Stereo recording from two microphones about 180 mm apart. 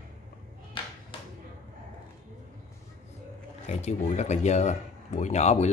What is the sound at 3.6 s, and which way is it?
Speech, 40° left (ahead or behind).